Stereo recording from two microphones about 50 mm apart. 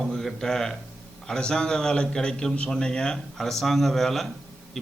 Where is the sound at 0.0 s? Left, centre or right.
Centre.